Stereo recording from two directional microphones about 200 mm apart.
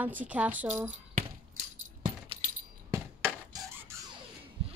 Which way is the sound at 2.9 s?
15° right (ahead or behind).